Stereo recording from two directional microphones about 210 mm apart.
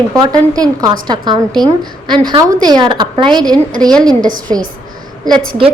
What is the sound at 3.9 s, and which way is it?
Speech, 5° left (ahead or behind).